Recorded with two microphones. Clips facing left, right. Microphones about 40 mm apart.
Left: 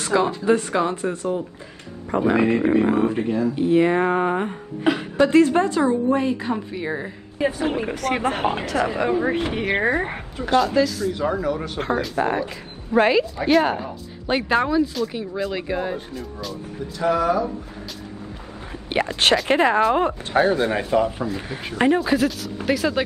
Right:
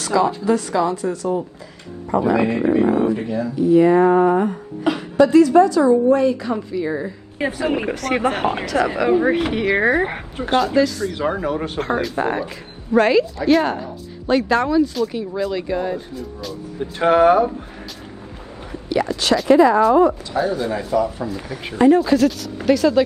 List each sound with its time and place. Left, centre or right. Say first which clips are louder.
0.0 s a woman's voice: right 2 dB; left
7.3 s speech: right 1 dB; right
9.2 s speech: right 4 dB; right
9.5 s speech: right 4 dB; right
10.6 s speech: right 5 dB; centre
11.1 s speech: right 3 dB; right
12.0 s speech: right 1 dB; centre
12.9 s a woman's voice: right 2 dB; centre
13.7 s a woman's voice: right 1 dB; centre
17.0 s speech: right 7 dB; right
18.7 s speech: right 3 dB; left
21.9 s a woman's voice: right 4 dB; centre